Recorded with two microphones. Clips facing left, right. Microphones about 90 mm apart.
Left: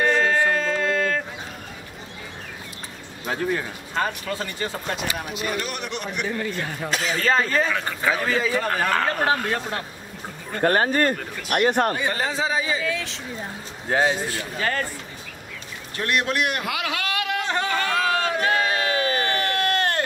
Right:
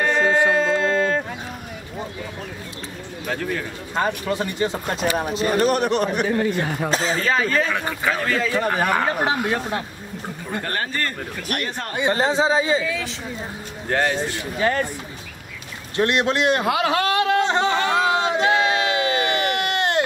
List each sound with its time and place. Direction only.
0.0 s a sound: 15° right (ahead or behind)
4.3 s speech: 20° right (ahead or behind)
4.9 s speech: 35° right (ahead or behind)
7.2 s speech: centre (ahead or behind)
8.5 s speech: 15° right (ahead or behind)
10.6 s speech: 40° left (ahead or behind)
11.9 s speech: 25° right (ahead or behind)
12.8 s speech: centre (ahead or behind)
14.4 s speech: 20° right (ahead or behind)
16.0 s a sound: 25° right (ahead or behind)